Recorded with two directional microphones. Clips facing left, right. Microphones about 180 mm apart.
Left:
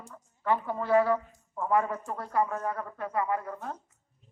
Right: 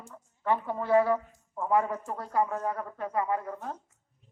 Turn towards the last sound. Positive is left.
turn(degrees=-20)  # may be behind; listen again after turning